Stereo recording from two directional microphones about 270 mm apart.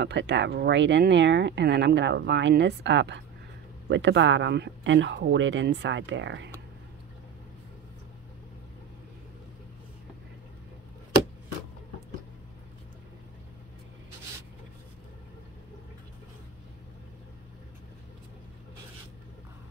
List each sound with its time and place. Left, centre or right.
0.0 s speech: right